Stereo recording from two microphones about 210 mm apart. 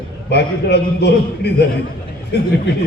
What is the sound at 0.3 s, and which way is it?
A man's voice, 55° left (ahead or behind).